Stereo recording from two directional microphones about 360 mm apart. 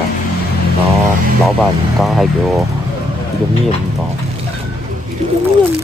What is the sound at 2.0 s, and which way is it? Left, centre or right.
Speech, centre.